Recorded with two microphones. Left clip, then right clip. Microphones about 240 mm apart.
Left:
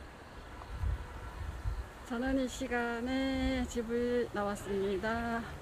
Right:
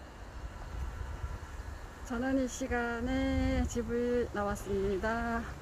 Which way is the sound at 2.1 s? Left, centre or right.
Centre.